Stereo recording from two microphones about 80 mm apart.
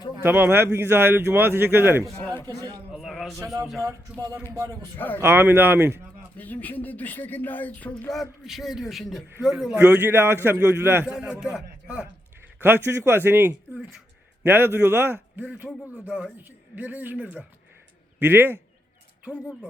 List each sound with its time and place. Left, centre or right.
0.2 s a man's voice: right
2.5 s a sound: right
2.9 s a sound: centre
3.4 s speech: right
4.9 s speech: left
5.2 s a man's voice: right
6.3 s speech: left
8.1 s a man's voice: centre
10.0 s a man's voice: right
11.0 s a man's voice: centre
12.5 s a man's voice: right
15.4 s a man's voice: centre